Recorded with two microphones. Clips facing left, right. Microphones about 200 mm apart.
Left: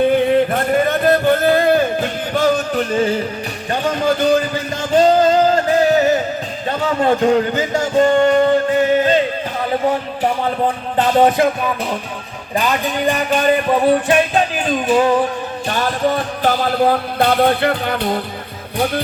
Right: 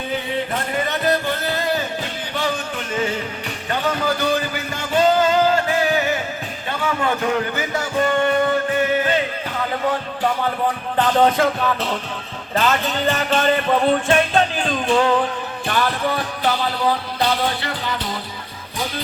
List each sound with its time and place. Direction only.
0.1 s a sound: 55° left (ahead or behind); by 3.2 s 35° left (ahead or behind)
3.8 s music: 20° left (ahead or behind)
4.9 s music: 40° left (ahead or behind)
6.7 s a man's voice: 35° left (ahead or behind)
7.9 s music: 30° left (ahead or behind); by 15.2 s 10° left (ahead or behind)
15.7 s music: 45° left (ahead or behind)